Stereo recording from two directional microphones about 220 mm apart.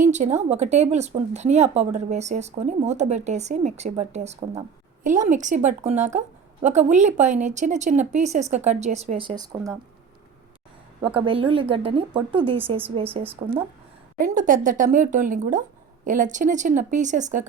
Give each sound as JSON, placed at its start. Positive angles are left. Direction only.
{"t": 0.0, "sound": "speech", "side_deg": -30}
{"t": 11.0, "sound": "a woman's voice", "side_deg": -20}
{"t": 14.3, "sound": "speech", "side_deg": -35}